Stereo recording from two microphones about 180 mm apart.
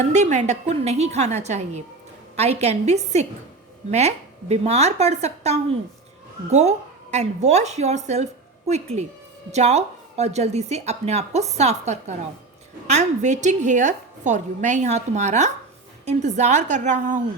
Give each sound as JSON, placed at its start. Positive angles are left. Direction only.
{"t": 0.0, "sound": "a woman's voice", "side_deg": -40}